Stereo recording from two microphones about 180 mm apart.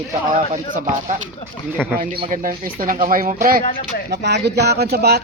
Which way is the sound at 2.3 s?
50° right (ahead or behind).